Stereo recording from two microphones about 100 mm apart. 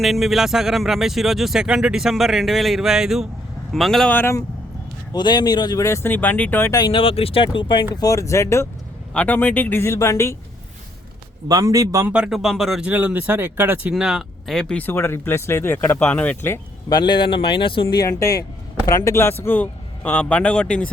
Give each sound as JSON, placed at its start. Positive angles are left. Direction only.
{"t": 0.0, "sound": "speech", "side_deg": 0}
{"t": 5.1, "sound": "speech", "side_deg": 45}
{"t": 5.8, "sound": "speech", "side_deg": 25}
{"t": 6.7, "sound": "speech", "side_deg": 40}
{"t": 6.9, "sound": "speech", "side_deg": 65}
{"t": 8.0, "sound": "speech", "side_deg": 30}
{"t": 9.1, "sound": "speech", "side_deg": 15}
{"t": 11.4, "sound": "a man's voice", "side_deg": -35}
{"t": 12.0, "sound": "speech", "side_deg": -10}
{"t": 12.8, "sound": "speech", "side_deg": -15}
{"t": 13.9, "sound": "speech", "side_deg": -5}
{"t": 14.8, "sound": "speech", "side_deg": 25}
{"t": 16.9, "sound": "speech", "side_deg": 45}
{"t": 17.8, "sound": "speech", "side_deg": 35}